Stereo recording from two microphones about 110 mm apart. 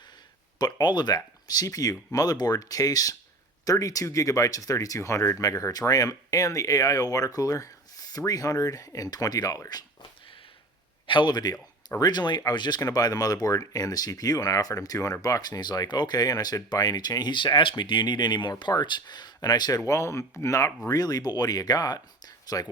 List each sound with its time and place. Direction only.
0.6 s a man's voice: 40° left (ahead or behind)